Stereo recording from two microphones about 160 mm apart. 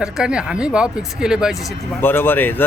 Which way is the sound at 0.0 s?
5° right (ahead or behind).